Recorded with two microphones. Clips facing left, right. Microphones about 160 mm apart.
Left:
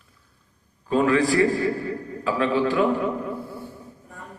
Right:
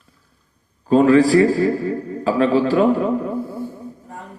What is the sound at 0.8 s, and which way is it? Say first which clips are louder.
A man's voice: right 7 dB; 35° right (ahead or behind).